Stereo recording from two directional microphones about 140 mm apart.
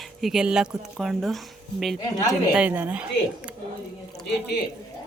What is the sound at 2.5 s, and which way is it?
Speech, 10° right (ahead or behind).